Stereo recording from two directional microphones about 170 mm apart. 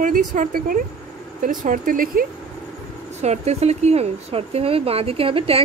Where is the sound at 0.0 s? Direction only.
50° right (ahead or behind).